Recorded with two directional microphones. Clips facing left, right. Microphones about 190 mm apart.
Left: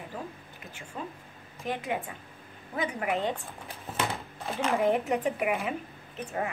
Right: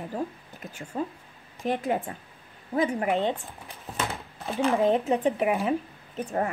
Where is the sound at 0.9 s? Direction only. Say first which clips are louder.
Right 8 dB; 35° right (ahead or behind).